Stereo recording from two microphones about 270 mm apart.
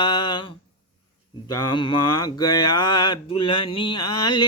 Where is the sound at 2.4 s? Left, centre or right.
Left.